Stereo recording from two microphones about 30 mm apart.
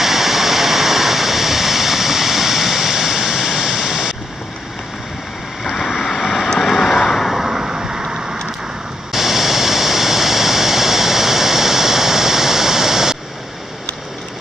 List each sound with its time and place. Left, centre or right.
0.0 s a sound: centre
5.6 s vehicle: centre
7.4 s vehicle: centre
9.1 s waterfall: centre